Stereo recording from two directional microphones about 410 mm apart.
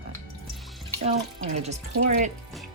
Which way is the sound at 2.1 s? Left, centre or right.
Centre.